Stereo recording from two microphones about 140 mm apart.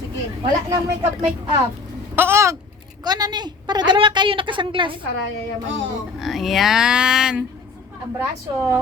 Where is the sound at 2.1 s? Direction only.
15° right (ahead or behind).